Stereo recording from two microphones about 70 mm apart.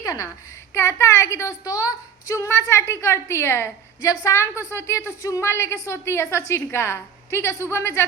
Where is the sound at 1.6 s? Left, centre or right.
Left.